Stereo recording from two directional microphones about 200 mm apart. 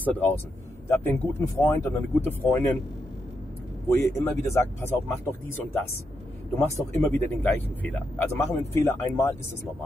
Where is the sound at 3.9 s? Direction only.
10° left (ahead or behind).